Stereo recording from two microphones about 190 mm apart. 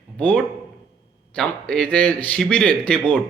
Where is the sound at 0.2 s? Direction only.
5° left (ahead or behind).